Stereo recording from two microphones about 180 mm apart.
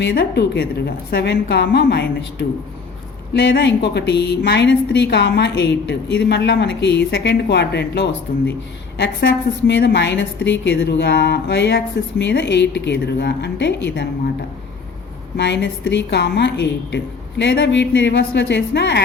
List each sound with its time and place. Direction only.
0.0 s a woman's voice: 70° left (ahead or behind)
15.4 s a woman's voice: 75° left (ahead or behind)